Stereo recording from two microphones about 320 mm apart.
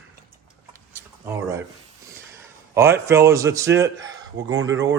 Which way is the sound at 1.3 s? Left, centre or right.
Centre.